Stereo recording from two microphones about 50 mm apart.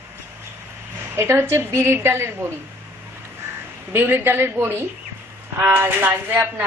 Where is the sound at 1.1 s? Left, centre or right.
Right.